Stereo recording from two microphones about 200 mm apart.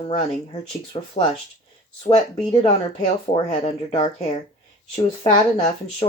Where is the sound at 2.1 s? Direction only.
30° left (ahead or behind).